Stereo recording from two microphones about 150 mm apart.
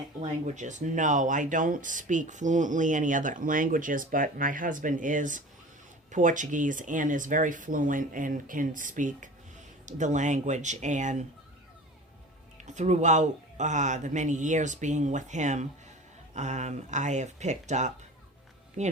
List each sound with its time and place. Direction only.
0.2 s a man's voice: 50° right (ahead or behind)
12.6 s a man's voice: 50° right (ahead or behind)